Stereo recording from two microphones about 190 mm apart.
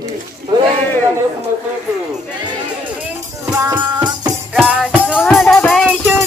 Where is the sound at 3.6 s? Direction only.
20° right (ahead or behind).